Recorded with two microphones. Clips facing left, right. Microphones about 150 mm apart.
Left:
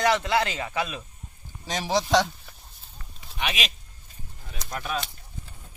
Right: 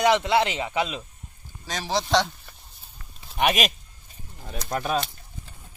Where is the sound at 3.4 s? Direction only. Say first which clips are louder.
Right 8 dB; 50° right (ahead or behind).